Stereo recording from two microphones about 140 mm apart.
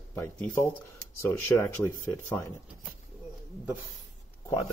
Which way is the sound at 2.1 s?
20° left (ahead or behind).